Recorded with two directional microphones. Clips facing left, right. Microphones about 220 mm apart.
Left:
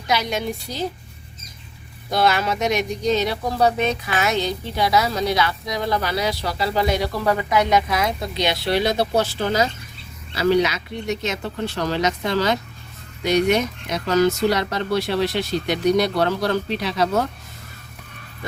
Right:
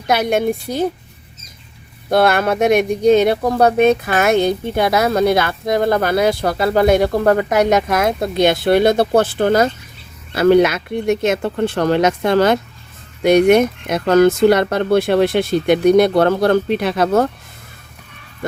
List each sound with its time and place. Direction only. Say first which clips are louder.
0.1 s speech: right 7 dB; 55° right (ahead or behind)
2.0 s speech: right 6 dB; 55° right (ahead or behind)